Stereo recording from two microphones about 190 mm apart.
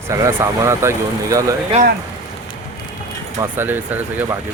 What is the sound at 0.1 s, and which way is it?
Speech, 15° right (ahead or behind).